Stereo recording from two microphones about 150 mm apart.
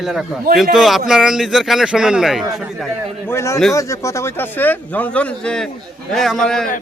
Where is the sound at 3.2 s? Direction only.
20° left (ahead or behind).